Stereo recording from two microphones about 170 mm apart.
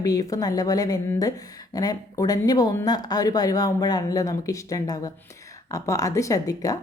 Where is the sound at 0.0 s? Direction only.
20° left (ahead or behind).